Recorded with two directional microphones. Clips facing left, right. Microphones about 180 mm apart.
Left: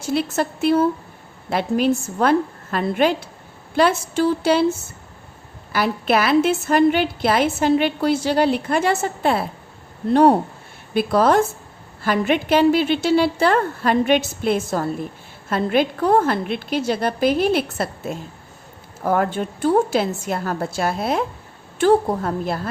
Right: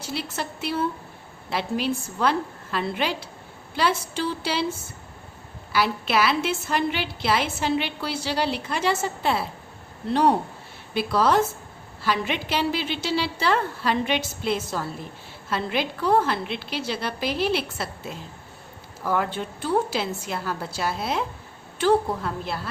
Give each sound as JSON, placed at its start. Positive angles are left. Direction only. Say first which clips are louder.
{"t": 0.0, "sound": "a woman's voice", "louder": "left 10 dB", "side_deg": 50}
{"t": 5.7, "sound": "a woman's voice", "louder": "left 4 dB", "side_deg": 50}